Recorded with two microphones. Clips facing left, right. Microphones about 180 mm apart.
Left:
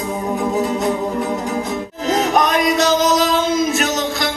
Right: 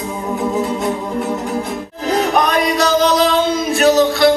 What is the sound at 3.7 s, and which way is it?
Music, 35° right (ahead or behind).